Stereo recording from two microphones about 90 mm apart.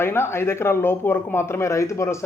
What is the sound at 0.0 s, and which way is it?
Speech, 25° left (ahead or behind).